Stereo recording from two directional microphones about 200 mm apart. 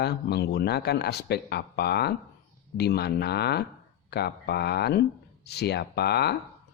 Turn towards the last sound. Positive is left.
turn(degrees=55)  # may be behind; listen again after turning